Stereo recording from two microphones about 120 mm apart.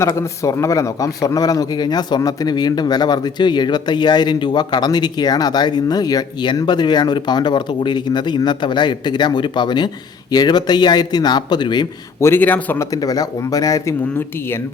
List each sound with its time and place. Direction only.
0.2 s speech: 25° left (ahead or behind)
12.2 s a man's voice: 15° left (ahead or behind)
12.8 s speech: 30° left (ahead or behind)